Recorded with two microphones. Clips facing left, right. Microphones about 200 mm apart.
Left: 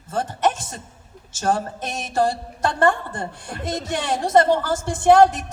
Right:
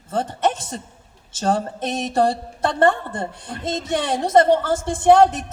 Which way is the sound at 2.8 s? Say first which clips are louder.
Right 2 dB; 25° right (ahead or behind).